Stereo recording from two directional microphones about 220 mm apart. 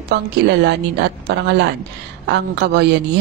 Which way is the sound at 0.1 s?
50° right (ahead or behind).